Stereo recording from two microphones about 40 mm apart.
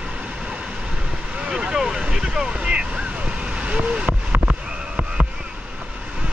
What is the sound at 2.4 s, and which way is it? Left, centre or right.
Vehicle, right.